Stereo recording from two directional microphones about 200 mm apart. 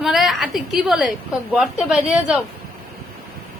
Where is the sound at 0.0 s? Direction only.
Centre (ahead or behind).